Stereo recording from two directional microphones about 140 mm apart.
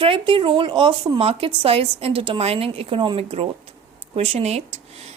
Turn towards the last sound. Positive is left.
turn(degrees=-50)  # may be behind; listen again after turning